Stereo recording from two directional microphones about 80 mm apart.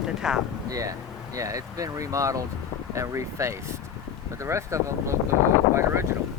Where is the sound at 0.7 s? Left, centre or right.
Right.